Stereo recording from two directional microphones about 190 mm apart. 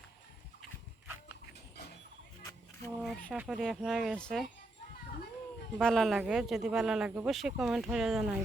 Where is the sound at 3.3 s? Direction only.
5° right (ahead or behind).